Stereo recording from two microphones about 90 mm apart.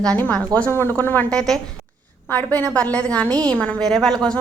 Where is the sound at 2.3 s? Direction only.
15° left (ahead or behind).